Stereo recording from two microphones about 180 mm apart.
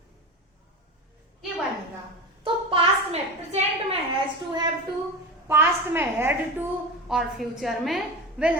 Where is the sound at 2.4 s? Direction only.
30° right (ahead or behind).